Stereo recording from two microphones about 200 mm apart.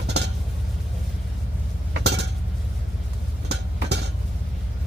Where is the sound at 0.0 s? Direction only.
60° right (ahead or behind).